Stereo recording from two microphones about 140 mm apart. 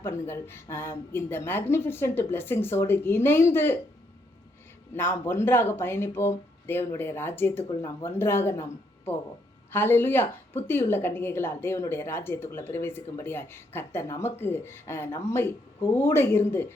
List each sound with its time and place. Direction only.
0.0 s a woman's voice: 15° left (ahead or behind)
4.9 s a woman's voice: 15° left (ahead or behind)
7.7 s speech: 30° left (ahead or behind)
8.0 s a woman's voice: 15° left (ahead or behind)